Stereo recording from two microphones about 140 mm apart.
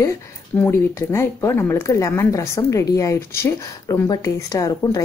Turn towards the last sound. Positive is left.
turn(degrees=25)  # may be behind; listen again after turning